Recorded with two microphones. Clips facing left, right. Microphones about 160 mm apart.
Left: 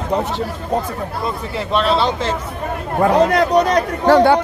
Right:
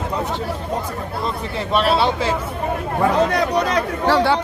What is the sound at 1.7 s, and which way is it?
Speech, 5° right (ahead or behind).